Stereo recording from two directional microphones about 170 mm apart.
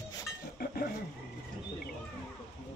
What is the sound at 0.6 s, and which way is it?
Dishes, 65° left (ahead or behind).